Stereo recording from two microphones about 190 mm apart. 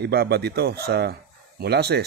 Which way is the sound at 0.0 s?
60° right (ahead or behind).